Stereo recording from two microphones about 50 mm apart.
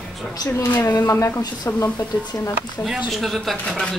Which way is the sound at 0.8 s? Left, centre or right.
Left.